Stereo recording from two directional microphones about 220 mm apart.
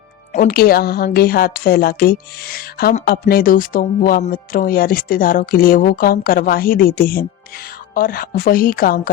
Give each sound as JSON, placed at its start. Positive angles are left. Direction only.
{"t": 0.3, "sound": "a woman's voice", "side_deg": 45}